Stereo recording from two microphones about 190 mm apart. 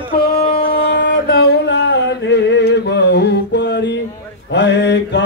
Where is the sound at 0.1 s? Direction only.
55° left (ahead or behind).